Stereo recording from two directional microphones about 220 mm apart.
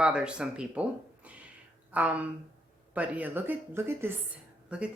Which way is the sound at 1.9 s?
5° right (ahead or behind).